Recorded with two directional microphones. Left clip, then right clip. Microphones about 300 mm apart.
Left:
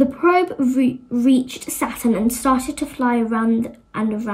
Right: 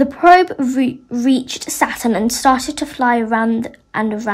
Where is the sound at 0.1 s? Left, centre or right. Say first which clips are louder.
Right 7 dB; centre.